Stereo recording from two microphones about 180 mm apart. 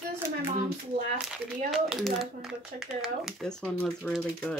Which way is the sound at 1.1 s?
5° right (ahead or behind).